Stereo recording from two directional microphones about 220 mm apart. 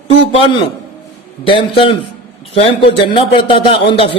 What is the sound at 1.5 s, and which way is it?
A man's voice, 25° left (ahead or behind).